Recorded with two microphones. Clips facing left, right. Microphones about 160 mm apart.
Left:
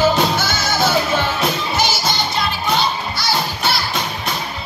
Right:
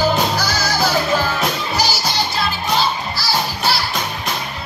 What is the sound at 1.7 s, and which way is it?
Music, centre (ahead or behind).